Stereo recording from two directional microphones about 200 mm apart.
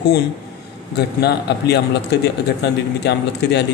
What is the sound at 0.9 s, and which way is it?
A man's voice, 55° left (ahead or behind).